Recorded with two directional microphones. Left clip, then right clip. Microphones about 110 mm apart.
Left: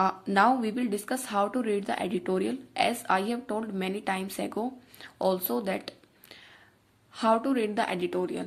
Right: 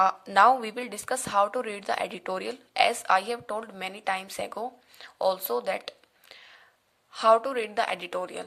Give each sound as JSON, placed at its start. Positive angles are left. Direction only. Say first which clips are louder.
{"t": 0.0, "sound": "speech", "louder": "right 4 dB", "side_deg": -30}